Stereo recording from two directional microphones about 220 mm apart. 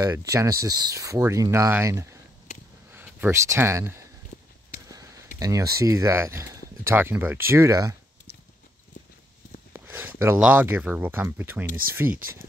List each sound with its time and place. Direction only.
0.0 s speech: 15° right (ahead or behind)
4.3 s walk: 35° left (ahead or behind)
4.7 s a sound: 15° right (ahead or behind)
5.4 s speech: 15° right (ahead or behind)
9.8 s speech: 10° right (ahead or behind)